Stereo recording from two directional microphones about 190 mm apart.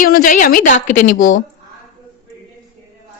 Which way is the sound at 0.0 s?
45° left (ahead or behind).